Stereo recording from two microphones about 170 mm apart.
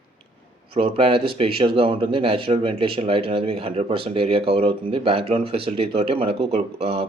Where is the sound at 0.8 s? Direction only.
30° right (ahead or behind).